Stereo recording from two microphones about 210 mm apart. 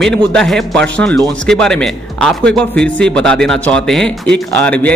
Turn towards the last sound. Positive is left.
turn(degrees=5)  # may be behind; listen again after turning